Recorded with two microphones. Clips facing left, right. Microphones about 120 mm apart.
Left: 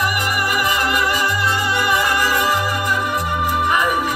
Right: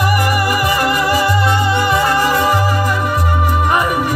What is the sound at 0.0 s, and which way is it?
Music, 35° right (ahead or behind).